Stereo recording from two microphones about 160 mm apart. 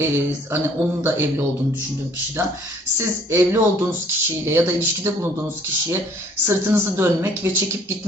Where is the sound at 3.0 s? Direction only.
15° right (ahead or behind).